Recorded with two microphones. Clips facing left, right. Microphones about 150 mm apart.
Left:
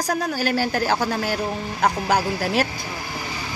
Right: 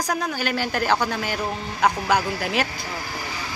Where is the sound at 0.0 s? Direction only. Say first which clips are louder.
Left 2 dB; 45° left (ahead or behind).